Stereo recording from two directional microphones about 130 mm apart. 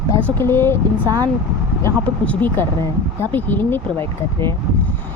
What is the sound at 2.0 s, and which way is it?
Speech, 10° left (ahead or behind).